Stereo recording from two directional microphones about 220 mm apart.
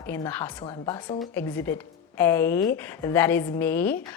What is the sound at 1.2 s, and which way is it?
A woman's voice, 10° left (ahead or behind).